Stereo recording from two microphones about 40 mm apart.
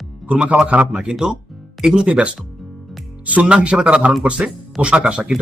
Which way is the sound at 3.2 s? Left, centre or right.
Right.